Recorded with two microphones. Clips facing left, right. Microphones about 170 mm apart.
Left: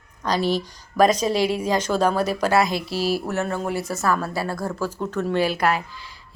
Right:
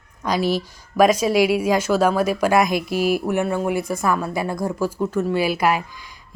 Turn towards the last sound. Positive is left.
turn(degrees=-10)  # may be behind; listen again after turning